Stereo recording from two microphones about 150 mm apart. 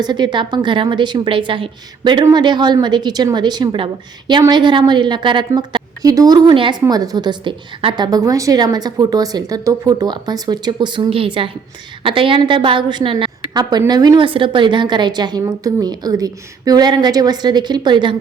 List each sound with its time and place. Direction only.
0.0 s a woman's voice: 30° right (ahead or behind)